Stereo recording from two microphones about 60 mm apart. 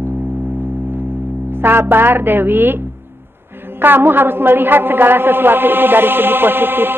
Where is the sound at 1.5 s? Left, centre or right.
Right.